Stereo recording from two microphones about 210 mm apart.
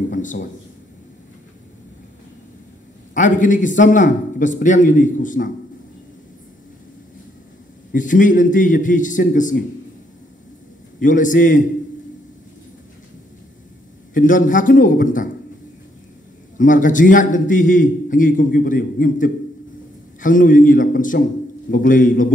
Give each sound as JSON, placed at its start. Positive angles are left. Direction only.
{"t": 0.1, "sound": "a man's voice", "side_deg": 35}
{"t": 3.2, "sound": "a man's voice", "side_deg": 35}
{"t": 7.9, "sound": "a man's voice", "side_deg": 40}
{"t": 11.0, "sound": "a man's voice", "side_deg": 40}
{"t": 14.1, "sound": "a man's voice", "side_deg": 40}
{"t": 16.5, "sound": "a man's voice", "side_deg": 40}